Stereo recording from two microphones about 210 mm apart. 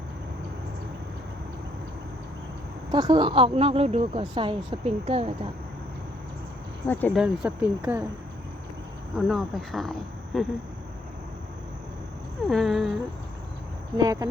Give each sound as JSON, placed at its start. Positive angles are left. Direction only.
{"t": 2.9, "sound": "speech", "side_deg": -20}
{"t": 6.8, "sound": "speech", "side_deg": 10}
{"t": 7.2, "sound": "speech", "side_deg": -5}
{"t": 9.1, "sound": "speech", "side_deg": 0}
{"t": 12.5, "sound": "speech", "side_deg": 0}
{"t": 13.9, "sound": "speech", "side_deg": -15}